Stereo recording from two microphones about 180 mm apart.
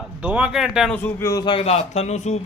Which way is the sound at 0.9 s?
15° left (ahead or behind).